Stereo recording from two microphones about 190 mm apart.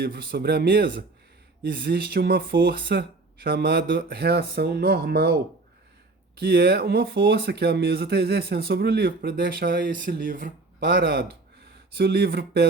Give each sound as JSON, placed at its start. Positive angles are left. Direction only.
{"t": 0.0, "sound": "speech", "side_deg": -50}